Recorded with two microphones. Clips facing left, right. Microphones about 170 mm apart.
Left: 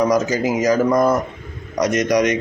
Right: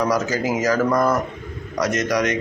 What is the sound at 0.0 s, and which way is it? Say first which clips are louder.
Speech: left 4 dB; 15° left (ahead or behind).